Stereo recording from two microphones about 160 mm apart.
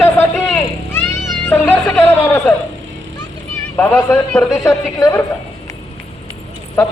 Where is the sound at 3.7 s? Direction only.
15° left (ahead or behind).